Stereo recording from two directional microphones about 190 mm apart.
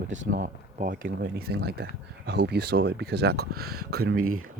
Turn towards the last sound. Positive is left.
turn(degrees=-90)